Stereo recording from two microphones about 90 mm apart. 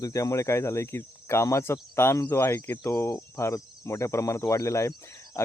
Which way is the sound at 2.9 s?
35° left (ahead or behind).